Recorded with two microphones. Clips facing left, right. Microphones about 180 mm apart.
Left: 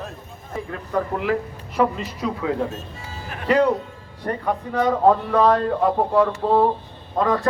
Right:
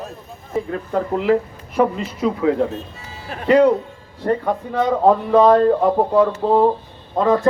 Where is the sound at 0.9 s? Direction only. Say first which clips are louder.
Right 4 dB; 25° right (ahead or behind).